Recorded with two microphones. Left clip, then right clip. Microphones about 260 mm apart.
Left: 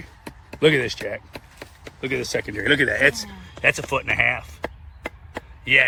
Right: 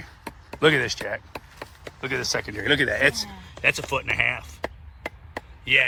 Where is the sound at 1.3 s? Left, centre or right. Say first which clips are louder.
Right 1 dB; right.